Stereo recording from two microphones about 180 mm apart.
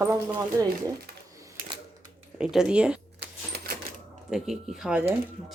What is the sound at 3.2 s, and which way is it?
Typewriter, 60° right (ahead or behind).